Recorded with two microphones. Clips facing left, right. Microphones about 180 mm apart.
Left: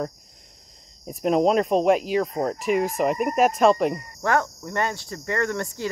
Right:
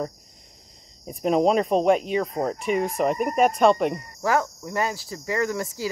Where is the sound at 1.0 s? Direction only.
Centre (ahead or behind).